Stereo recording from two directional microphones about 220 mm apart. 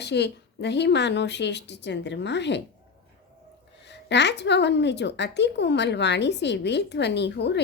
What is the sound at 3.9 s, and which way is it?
A woman's voice, 50° left (ahead or behind).